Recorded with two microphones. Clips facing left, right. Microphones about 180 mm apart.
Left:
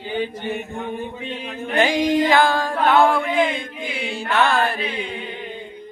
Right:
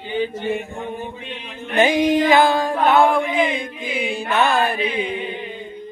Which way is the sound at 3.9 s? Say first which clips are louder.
Right 2 dB; 20° right (ahead or behind).